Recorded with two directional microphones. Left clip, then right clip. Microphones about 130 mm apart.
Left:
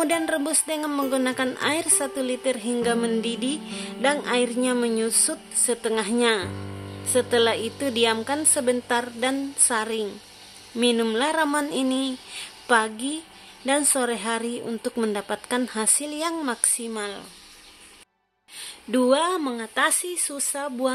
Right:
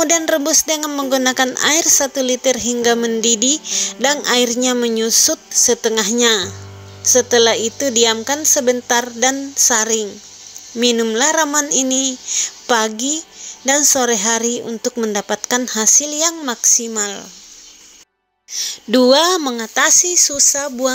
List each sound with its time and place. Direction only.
0.0 s a woman's voice: 40° right (ahead or behind)
18.9 s a woman's voice: 50° right (ahead or behind); by 20.9 s 30° right (ahead or behind)